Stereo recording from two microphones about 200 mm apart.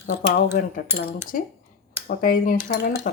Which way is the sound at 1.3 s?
45° left (ahead or behind).